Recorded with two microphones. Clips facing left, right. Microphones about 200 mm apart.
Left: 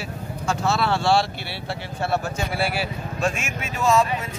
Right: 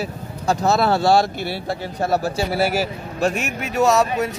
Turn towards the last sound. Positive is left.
turn(degrees=-70)  # may be behind; listen again after turning